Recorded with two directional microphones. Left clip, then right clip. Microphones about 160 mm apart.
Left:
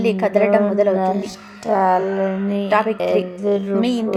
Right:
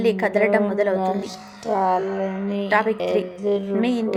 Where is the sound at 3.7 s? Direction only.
45° left (ahead or behind).